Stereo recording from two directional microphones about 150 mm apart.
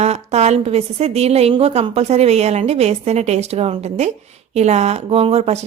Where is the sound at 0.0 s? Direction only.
45° right (ahead or behind).